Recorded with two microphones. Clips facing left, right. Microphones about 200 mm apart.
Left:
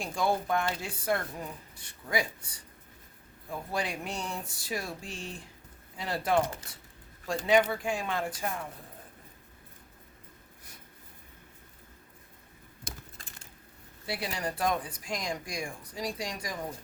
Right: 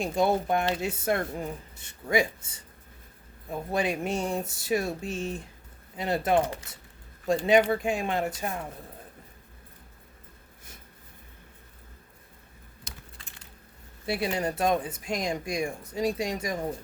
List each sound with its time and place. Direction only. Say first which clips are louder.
0.0 s speech: right 5 dB; 20° right (ahead or behind)
7.4 s speech: right 2 dB; 20° right (ahead or behind)
12.8 s a sound: left 3 dB; 45° left (ahead or behind)
14.1 s speech: right 6 dB; 25° right (ahead or behind)